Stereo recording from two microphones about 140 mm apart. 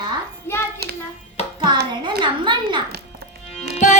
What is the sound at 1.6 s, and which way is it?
A child's voice, 35° right (ahead or behind).